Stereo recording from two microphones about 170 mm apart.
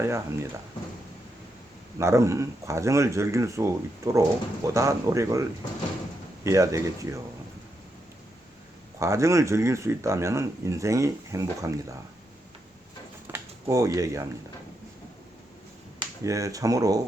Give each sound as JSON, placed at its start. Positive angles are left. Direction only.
{"t": 0.0, "sound": "speech", "side_deg": -15}
{"t": 2.0, "sound": "speech", "side_deg": -15}
{"t": 9.0, "sound": "speech", "side_deg": -15}
{"t": 13.3, "sound": "speech", "side_deg": -20}
{"t": 16.0, "sound": "speech", "side_deg": -20}